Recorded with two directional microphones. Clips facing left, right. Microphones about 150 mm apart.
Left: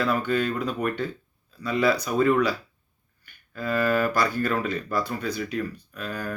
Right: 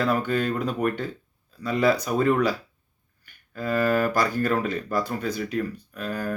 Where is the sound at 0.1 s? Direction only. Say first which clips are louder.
Right 1 dB; 45° right (ahead or behind).